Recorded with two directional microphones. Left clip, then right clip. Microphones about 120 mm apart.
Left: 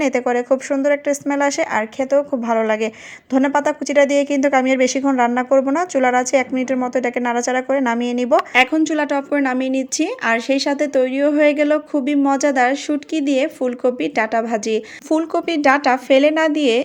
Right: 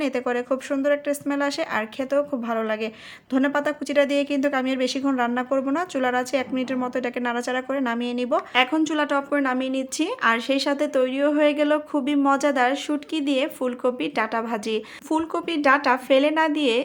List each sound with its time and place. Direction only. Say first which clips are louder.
0.0 s a woman's voice: left 7 dB; 35° left (ahead or behind)
0.3 s speech: left 7 dB; 20° left (ahead or behind)
1.8 s a woman's voice: left 6 dB; 15° left (ahead or behind)
2.4 s a woman's voice: left 8 dB; 30° left (ahead or behind)
8.8 s speech: left 4 dB; 20° left (ahead or behind)